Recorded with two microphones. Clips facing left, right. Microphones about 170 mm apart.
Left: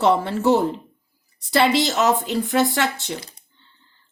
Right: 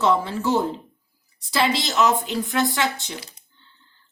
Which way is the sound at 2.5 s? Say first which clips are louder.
Left 3 dB; 70° left (ahead or behind).